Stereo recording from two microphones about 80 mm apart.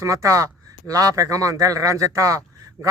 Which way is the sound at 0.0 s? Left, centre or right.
Right.